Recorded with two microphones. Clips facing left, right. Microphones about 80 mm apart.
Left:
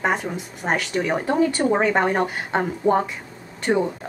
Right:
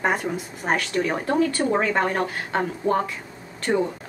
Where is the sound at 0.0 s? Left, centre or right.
Centre.